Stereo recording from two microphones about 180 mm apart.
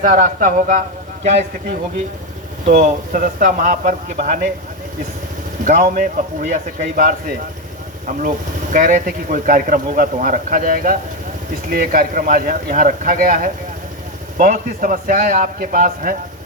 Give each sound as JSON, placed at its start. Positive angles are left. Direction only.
{"t": 0.0, "sound": "speech", "side_deg": -45}
{"t": 2.6, "sound": "speech", "side_deg": -40}
{"t": 5.6, "sound": "speech", "side_deg": -45}
{"t": 8.7, "sound": "speech", "side_deg": -45}